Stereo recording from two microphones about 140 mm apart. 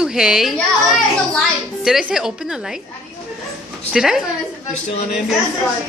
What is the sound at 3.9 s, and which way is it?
Speech, centre (ahead or behind).